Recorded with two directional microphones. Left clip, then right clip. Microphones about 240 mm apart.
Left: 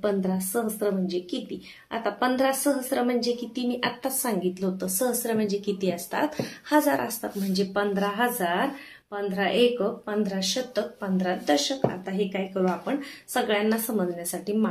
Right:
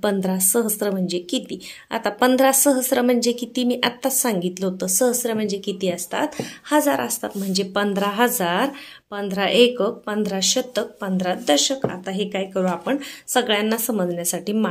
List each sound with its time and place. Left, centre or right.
0.0 s speech: right